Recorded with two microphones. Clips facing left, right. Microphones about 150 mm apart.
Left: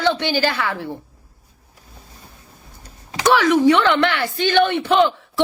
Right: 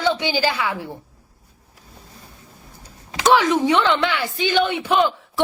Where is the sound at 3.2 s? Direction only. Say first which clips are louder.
Left 2 dB; 20° right (ahead or behind).